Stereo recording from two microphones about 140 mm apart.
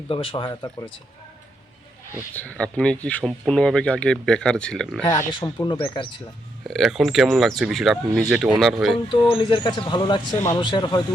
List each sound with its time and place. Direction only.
0.1 s speech: 40° left (ahead or behind)
2.3 s speech: 10° left (ahead or behind)
5.0 s speech: 30° left (ahead or behind)
6.7 s speech: centre (ahead or behind)
9.0 s speech: 35° left (ahead or behind)
10.3 s speech: 20° left (ahead or behind)
10.6 s speech: 35° left (ahead or behind)